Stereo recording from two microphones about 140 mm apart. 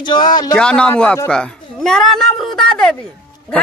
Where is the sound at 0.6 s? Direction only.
5° left (ahead or behind).